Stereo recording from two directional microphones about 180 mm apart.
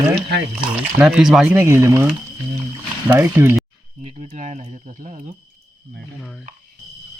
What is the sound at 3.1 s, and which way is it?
Speech, 15° right (ahead or behind).